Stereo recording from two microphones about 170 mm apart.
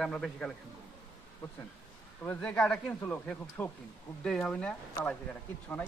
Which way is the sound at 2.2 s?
5° left (ahead or behind).